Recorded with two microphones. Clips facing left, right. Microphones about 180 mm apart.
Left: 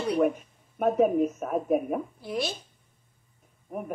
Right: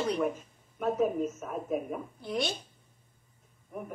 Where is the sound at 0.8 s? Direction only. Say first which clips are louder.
Left 6 dB; 65° left (ahead or behind).